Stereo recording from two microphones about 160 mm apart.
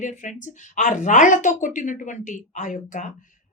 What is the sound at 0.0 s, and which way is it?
A woman's voice, 50° left (ahead or behind).